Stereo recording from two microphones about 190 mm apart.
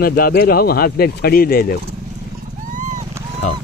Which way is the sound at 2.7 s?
40° right (ahead or behind).